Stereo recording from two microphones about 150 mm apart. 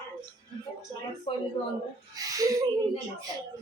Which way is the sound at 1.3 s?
35° left (ahead or behind).